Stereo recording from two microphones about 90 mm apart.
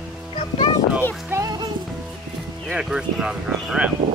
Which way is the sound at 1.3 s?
30° right (ahead or behind).